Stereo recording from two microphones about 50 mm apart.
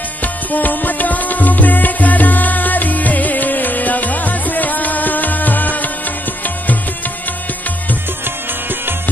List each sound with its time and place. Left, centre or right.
0.2 s music: left